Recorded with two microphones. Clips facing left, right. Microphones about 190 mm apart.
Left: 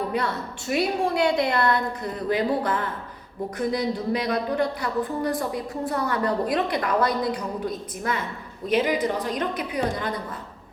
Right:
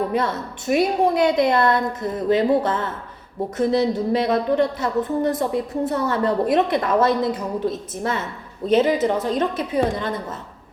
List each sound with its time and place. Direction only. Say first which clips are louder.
0.1 s speech: right 4 dB; 20° right (ahead or behind)